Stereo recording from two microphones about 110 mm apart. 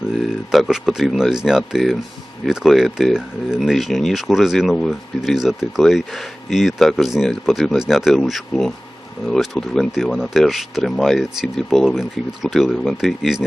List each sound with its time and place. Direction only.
0.1 s speech: centre (ahead or behind)